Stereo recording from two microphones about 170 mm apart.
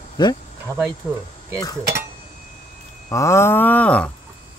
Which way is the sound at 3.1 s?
15° left (ahead or behind).